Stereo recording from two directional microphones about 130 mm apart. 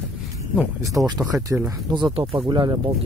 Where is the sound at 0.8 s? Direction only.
30° right (ahead or behind).